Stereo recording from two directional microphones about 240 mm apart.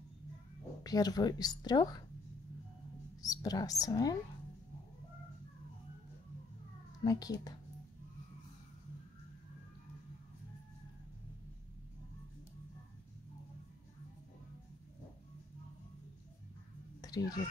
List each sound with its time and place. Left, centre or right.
0.8 s a woman's voice: centre
3.2 s speech: centre
7.1 s a woman's voice: centre
17.0 s a sound: centre